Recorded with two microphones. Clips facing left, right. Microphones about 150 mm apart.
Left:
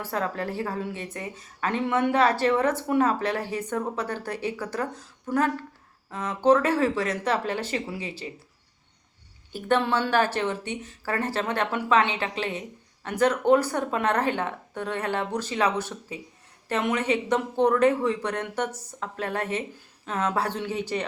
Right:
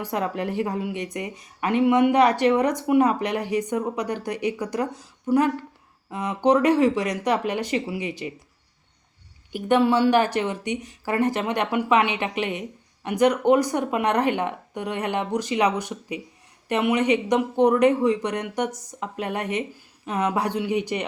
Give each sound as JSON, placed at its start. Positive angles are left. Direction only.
{"t": 0.0, "sound": "speech", "side_deg": -15}
{"t": 9.5, "sound": "speech", "side_deg": -15}